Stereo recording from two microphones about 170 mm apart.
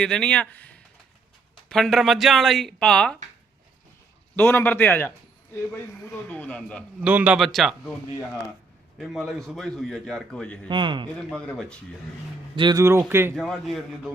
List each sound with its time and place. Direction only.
0.0 s a man's voice: 5° left (ahead or behind)
4.4 s speech: 10° left (ahead or behind)
7.0 s a man's voice: 10° right (ahead or behind)
9.0 s a man's voice: centre (ahead or behind)
10.7 s a man's voice: 30° right (ahead or behind)
11.3 s a man's voice: 5° left (ahead or behind)
12.5 s a man's voice: 25° right (ahead or behind)
12.8 s speech: 15° right (ahead or behind)
13.3 s a man's voice: centre (ahead or behind)